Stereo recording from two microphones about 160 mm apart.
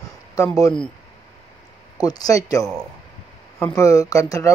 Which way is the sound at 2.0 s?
25° left (ahead or behind).